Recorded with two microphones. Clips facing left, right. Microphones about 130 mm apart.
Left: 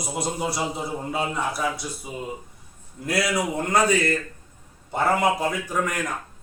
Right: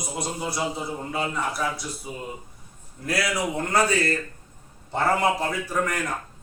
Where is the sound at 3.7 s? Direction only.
15° left (ahead or behind).